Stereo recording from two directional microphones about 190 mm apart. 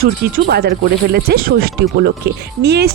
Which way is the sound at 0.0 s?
55° right (ahead or behind).